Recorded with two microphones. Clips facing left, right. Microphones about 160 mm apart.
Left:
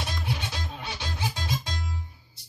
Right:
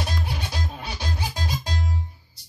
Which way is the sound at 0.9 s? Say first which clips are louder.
Right 2 dB; 35° right (ahead or behind).